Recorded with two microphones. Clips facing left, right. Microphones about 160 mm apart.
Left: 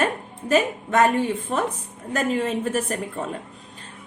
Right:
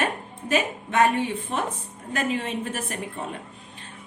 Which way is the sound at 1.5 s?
40° left (ahead or behind).